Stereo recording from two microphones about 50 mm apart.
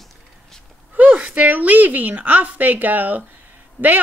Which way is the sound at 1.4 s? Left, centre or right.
Right.